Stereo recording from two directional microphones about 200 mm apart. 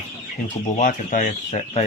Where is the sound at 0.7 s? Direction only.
40° left (ahead or behind).